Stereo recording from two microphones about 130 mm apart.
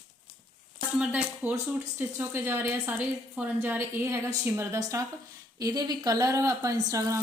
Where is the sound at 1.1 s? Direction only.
10° right (ahead or behind).